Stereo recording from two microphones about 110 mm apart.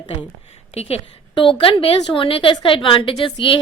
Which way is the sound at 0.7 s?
65° left (ahead or behind).